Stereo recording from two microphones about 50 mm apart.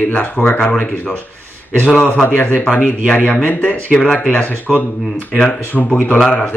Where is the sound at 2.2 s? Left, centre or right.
Left.